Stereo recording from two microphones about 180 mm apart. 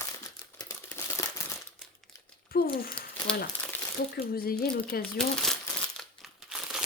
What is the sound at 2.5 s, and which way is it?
Speech, 55° left (ahead or behind).